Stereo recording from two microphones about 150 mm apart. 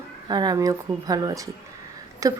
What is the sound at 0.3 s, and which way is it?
Speech, 30° right (ahead or behind).